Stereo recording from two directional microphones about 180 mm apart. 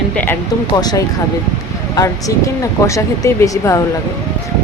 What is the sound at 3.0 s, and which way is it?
Speech, 15° left (ahead or behind).